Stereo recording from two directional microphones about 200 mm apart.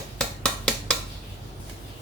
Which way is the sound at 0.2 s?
5° left (ahead or behind).